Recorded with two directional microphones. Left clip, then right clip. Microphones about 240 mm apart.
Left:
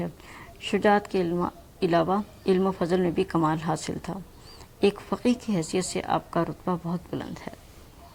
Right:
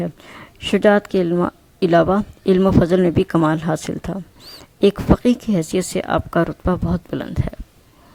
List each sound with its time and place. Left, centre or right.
0.0 s speech: right
4.8 s speech: right